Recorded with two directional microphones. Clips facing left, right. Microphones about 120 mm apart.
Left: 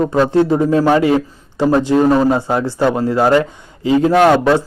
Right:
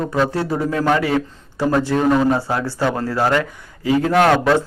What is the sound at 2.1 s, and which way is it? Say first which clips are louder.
A man's voice: left 3 dB; 25° left (ahead or behind).